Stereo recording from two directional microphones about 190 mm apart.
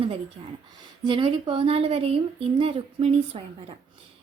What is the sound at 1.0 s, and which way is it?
A woman's voice, 25° right (ahead or behind).